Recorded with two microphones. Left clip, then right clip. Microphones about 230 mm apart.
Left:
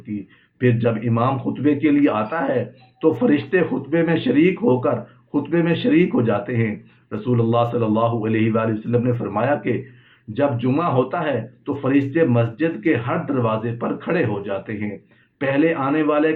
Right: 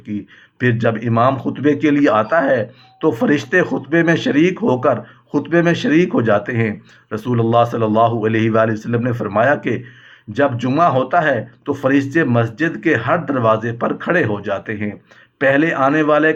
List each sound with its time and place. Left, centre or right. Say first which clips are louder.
0.6 s speech: right 3 dB; right